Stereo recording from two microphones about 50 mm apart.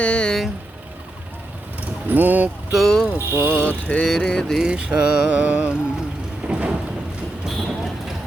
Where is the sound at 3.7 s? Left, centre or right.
Left.